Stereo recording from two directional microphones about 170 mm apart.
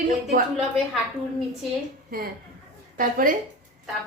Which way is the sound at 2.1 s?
60° right (ahead or behind).